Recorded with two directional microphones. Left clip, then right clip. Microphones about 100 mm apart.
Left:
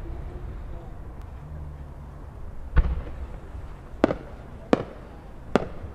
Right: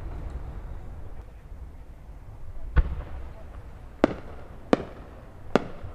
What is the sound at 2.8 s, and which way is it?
Fireworks, centre (ahead or behind).